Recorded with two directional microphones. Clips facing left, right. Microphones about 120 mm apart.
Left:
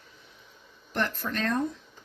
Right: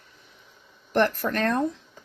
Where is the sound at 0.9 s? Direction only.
60° right (ahead or behind).